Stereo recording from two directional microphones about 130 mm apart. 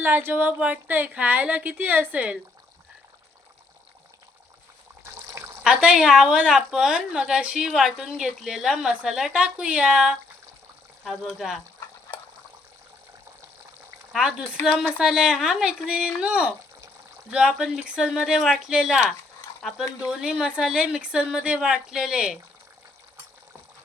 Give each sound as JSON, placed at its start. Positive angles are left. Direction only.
{"t": 0.0, "sound": "a woman's voice", "side_deg": -15}
{"t": 5.6, "sound": "a woman's voice", "side_deg": -5}
{"t": 14.1, "sound": "a woman's voice", "side_deg": -5}